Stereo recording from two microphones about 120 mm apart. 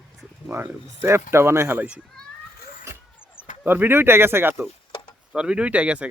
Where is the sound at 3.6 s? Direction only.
15° right (ahead or behind).